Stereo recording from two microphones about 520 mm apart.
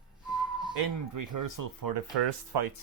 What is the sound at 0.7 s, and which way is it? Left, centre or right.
Speech, right.